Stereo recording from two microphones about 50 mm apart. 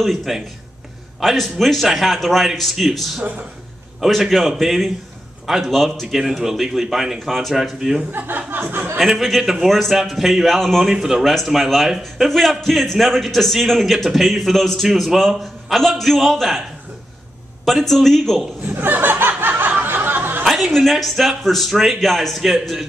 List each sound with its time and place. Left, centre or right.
0.0 s a man's voice: centre
6.0 s a man's voice: centre
8.1 s speech: right
9.0 s a man's voice: centre
10.9 s a man's voice: centre
17.6 s a man's voice: centre
18.7 s snicker: right
19.7 s a sound: right
20.7 s a man's voice: centre